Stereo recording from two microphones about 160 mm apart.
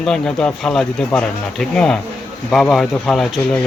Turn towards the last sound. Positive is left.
turn(degrees=5)  # may be behind; listen again after turning